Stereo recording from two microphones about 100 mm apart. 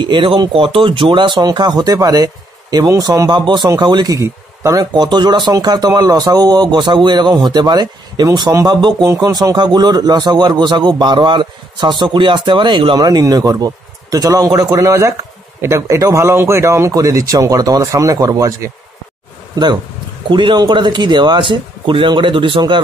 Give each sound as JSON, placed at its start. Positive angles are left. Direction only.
{"t": 0.0, "sound": "a man's voice", "side_deg": -55}
{"t": 4.9, "sound": "a man's voice", "side_deg": -45}
{"t": 19.5, "sound": "a man's voice", "side_deg": -45}